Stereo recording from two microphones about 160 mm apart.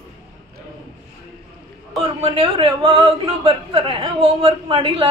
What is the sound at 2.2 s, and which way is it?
A man's voice, 35° right (ahead or behind).